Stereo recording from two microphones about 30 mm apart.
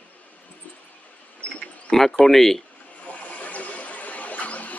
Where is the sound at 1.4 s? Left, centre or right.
Left.